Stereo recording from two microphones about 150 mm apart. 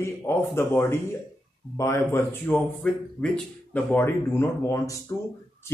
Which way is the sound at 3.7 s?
15° left (ahead or behind).